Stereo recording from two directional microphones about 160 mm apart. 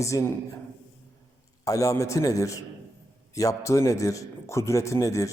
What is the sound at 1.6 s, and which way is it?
A man's voice, 20° left (ahead or behind).